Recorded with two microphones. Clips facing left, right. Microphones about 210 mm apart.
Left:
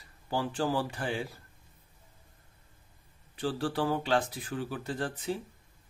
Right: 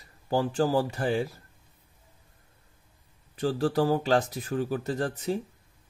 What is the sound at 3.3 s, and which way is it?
A man's voice, 45° right (ahead or behind).